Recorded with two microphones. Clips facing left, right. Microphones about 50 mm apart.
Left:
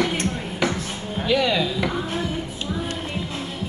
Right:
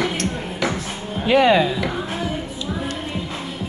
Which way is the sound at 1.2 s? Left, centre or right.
Right.